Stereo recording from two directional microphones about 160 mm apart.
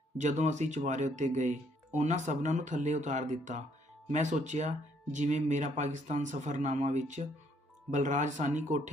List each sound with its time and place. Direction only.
0.2 s speech: 45° right (ahead or behind)